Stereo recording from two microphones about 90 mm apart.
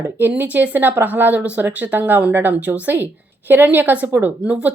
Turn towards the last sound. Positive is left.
turn(degrees=-15)  # may be behind; listen again after turning